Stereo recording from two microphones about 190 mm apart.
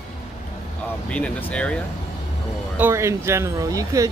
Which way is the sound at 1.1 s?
5° left (ahead or behind).